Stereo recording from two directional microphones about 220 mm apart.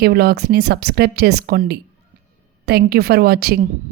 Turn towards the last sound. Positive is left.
turn(degrees=-45)  # may be behind; listen again after turning